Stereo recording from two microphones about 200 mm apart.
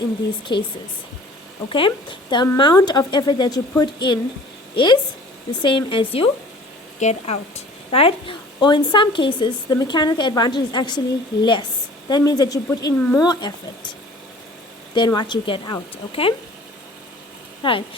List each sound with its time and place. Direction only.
0.5 s a woman's voice: 20° left (ahead or behind)
1.7 s a woman's voice: 25° left (ahead or behind)
12.0 s a woman's voice: 20° left (ahead or behind)
13.0 s speech: 10° left (ahead or behind)
13.2 s a woman's voice: 20° left (ahead or behind)
14.9 s a woman's voice: 20° left (ahead or behind)
17.6 s speech: 25° left (ahead or behind)